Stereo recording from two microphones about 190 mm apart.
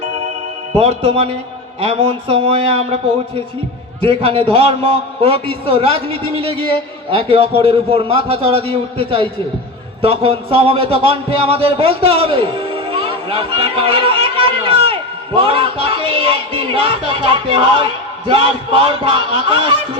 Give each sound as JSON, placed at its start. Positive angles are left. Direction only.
{"t": 0.8, "sound": "a man's voice", "side_deg": -30}
{"t": 4.0, "sound": "a man's voice", "side_deg": -30}